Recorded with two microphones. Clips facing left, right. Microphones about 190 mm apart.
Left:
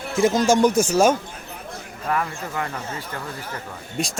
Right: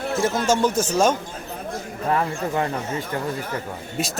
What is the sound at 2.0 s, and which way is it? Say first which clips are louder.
Speech: right 3 dB; 30° right (ahead or behind).